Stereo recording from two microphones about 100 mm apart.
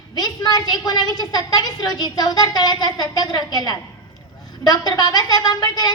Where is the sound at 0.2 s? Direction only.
45° left (ahead or behind).